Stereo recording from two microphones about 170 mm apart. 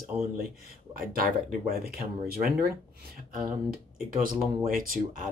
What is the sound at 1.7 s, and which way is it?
Speech, 65° right (ahead or behind).